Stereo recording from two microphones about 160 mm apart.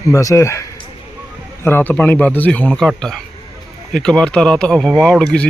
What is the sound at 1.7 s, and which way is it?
Speech, 10° left (ahead or behind).